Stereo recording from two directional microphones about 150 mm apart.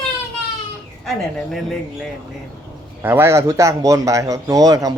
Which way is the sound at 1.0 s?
Centre (ahead or behind).